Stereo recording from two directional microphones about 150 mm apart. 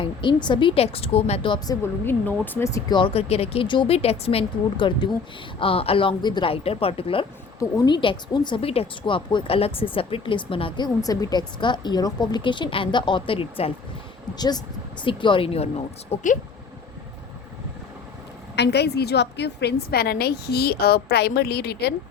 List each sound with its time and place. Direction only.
0.0 s a woman's voice: 35° left (ahead or behind)
3.0 s a woman's voice: 40° left (ahead or behind)
14.3 s a woman's voice: 25° left (ahead or behind); by 16.3 s 45° left (ahead or behind)
18.6 s a woman's voice: 90° left